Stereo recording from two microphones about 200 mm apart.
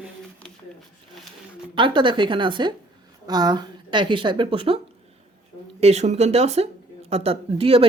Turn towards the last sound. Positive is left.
turn(degrees=-30)  # may be behind; listen again after turning